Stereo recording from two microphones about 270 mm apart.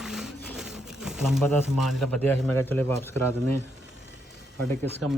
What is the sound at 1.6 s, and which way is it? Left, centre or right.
Speech, centre.